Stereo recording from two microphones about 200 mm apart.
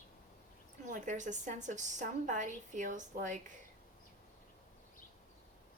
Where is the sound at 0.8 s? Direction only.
40° right (ahead or behind).